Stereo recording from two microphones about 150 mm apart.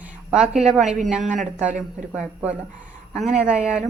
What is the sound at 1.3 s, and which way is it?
Speech, 10° right (ahead or behind).